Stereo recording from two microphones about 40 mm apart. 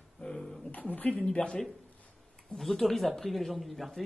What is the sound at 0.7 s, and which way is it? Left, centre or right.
Speech, left.